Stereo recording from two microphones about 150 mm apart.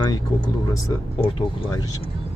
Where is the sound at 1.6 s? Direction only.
25° left (ahead or behind).